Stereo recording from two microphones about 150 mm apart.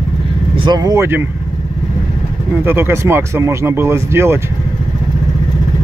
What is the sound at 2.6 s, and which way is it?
Speech, 15° right (ahead or behind).